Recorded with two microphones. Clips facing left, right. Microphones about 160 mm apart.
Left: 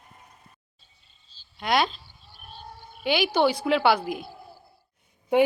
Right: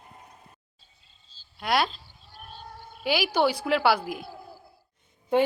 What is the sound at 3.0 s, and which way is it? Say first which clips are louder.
Speech: left 2 dB; 5° right (ahead or behind).